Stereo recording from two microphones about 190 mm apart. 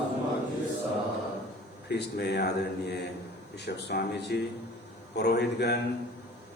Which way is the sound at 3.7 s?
60° left (ahead or behind).